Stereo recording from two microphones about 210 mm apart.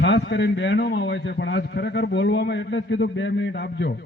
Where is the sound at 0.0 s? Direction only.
60° left (ahead or behind).